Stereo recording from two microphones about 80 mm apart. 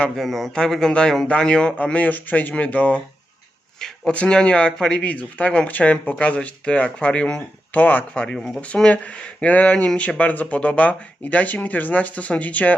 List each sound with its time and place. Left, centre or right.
0.0 s speech: centre; by 8.2 s left
8.2 s speech: centre
8.6 s speech: centre